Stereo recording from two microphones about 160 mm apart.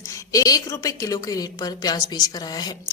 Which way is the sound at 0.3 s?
20° left (ahead or behind).